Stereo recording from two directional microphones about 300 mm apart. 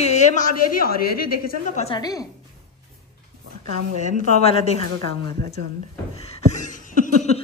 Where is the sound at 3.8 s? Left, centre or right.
Right.